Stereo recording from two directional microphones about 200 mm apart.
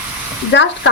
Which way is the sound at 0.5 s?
65° left (ahead or behind).